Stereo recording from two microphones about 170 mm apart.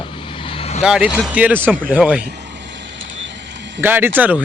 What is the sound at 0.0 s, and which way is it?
Vehicle, 30° left (ahead or behind).